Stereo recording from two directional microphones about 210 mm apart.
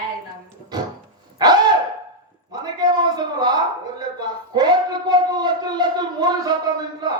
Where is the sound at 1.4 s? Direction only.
20° right (ahead or behind).